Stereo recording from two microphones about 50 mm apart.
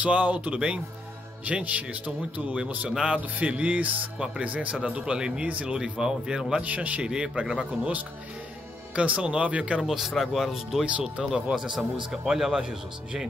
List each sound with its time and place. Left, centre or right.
0.0 s speech: right
2.9 s speech: centre
3.2 s speech: right
5.8 s speech: centre
6.6 s speech: right
7.0 s speech: centre
9.8 s speech: centre
10.9 s speech: right
11.5 s speech: centre